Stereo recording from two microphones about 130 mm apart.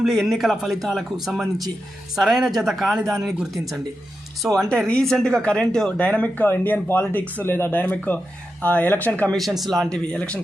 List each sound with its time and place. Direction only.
0.0 s a man's voice: centre (ahead or behind)
9.4 s a man's voice: centre (ahead or behind)